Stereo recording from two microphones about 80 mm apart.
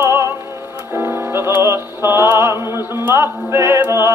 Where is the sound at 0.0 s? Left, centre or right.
Right.